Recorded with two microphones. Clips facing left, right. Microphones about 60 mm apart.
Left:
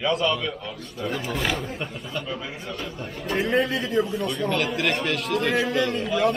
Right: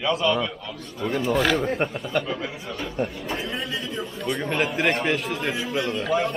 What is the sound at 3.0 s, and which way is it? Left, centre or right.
Speech, right.